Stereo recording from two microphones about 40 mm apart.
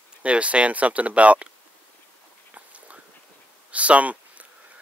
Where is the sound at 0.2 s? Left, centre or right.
Right.